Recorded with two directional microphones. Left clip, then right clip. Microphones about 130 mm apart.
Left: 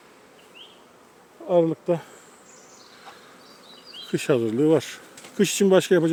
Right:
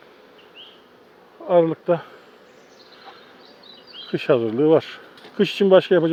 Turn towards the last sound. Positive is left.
turn(degrees=40)  # may be behind; listen again after turning